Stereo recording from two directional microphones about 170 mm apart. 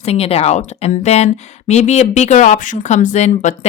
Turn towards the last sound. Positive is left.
turn(degrees=45)  # may be behind; listen again after turning